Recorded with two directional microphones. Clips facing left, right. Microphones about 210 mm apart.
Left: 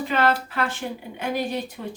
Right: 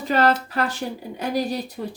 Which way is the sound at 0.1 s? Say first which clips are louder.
Right 4 dB; 40° right (ahead or behind).